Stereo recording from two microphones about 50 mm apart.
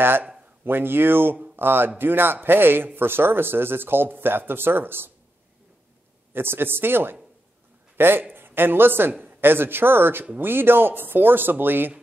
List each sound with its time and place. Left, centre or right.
0.7 s a man's voice: right
6.3 s a man's voice: right